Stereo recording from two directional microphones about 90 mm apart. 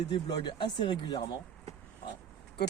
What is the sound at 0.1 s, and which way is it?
Speech, 60° left (ahead or behind).